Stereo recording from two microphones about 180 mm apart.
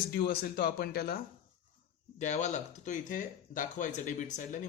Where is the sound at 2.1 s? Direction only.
40° left (ahead or behind).